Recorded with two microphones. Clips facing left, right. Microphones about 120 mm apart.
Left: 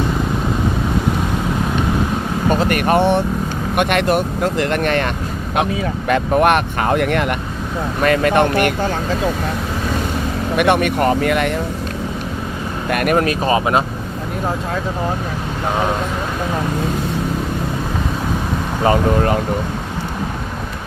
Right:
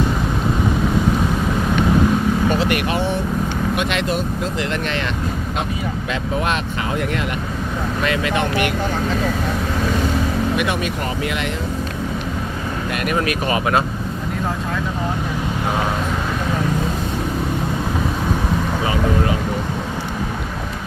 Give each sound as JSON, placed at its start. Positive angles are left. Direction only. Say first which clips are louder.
{"t": 2.5, "sound": "speech", "louder": "left 4 dB", "side_deg": 45}
{"t": 8.0, "sound": "speech", "louder": "left 7 dB", "side_deg": 50}
{"t": 10.6, "sound": "speech", "louder": "left 7 dB", "side_deg": 60}
{"t": 12.9, "sound": "speech", "louder": "left 6 dB", "side_deg": 50}
{"t": 13.2, "sound": "speech", "louder": "left 3 dB", "side_deg": 30}
{"t": 18.9, "sound": "speech", "louder": "left 7 dB", "side_deg": 50}